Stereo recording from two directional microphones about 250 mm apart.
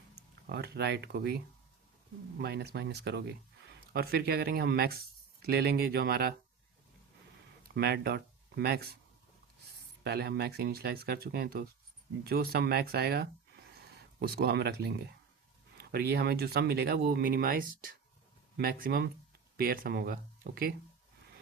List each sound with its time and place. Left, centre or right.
0.4 s speech: right
2.4 s speech: right
7.7 s speech: right
10.0 s speech: right